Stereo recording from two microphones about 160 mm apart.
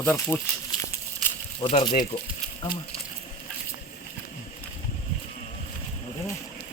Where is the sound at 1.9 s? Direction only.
60° left (ahead or behind).